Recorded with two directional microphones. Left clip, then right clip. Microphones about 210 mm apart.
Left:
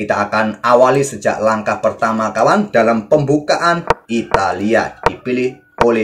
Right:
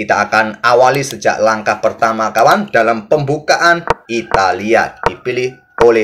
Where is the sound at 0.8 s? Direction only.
30° right (ahead or behind).